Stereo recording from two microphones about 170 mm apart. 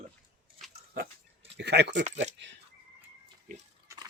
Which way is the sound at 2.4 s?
90° right.